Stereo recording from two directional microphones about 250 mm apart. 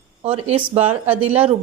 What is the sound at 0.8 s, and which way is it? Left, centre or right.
Speech, centre.